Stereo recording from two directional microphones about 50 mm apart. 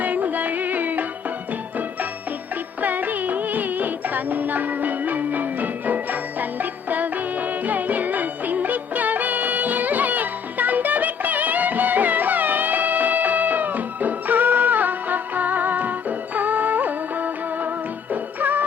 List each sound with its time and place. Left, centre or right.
0.0 s music: right
2.8 s music: right